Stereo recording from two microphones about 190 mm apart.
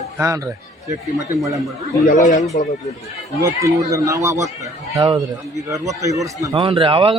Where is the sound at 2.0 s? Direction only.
40° left (ahead or behind).